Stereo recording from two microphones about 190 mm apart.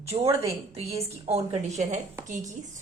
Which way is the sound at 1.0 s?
35° right (ahead or behind).